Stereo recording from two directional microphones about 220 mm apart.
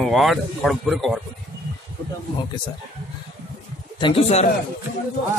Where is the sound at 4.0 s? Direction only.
25° left (ahead or behind).